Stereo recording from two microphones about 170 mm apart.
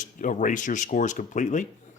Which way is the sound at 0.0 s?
50° left (ahead or behind).